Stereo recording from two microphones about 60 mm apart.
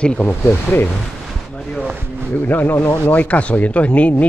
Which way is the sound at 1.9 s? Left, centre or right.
Right.